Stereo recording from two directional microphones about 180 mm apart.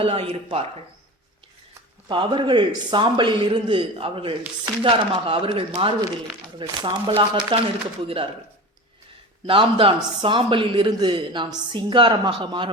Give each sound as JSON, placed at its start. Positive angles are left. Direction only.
{"t": 0.0, "sound": "speech", "side_deg": -30}
{"t": 2.0, "sound": "a man's voice", "side_deg": -25}
{"t": 9.5, "sound": "a man's voice", "side_deg": -30}